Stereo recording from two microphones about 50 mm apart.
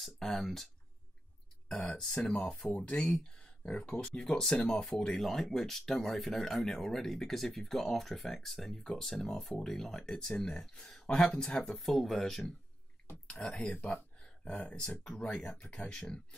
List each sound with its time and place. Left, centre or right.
0.0 s speech: centre
1.7 s speech: centre
13.3 s speech: centre
14.9 s speech: centre